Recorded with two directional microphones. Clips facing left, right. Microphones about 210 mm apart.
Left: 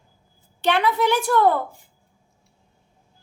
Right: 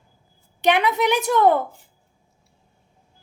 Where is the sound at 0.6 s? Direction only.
15° right (ahead or behind).